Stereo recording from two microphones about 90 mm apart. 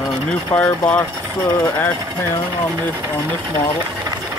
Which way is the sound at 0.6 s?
15° left (ahead or behind).